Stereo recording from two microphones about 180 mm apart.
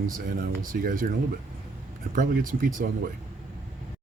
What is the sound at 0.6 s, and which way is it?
Speech, 50° right (ahead or behind).